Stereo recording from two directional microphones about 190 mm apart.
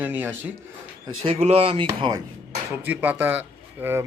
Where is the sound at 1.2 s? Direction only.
30° right (ahead or behind).